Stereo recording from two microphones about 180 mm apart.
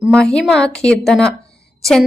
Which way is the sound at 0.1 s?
5° left (ahead or behind).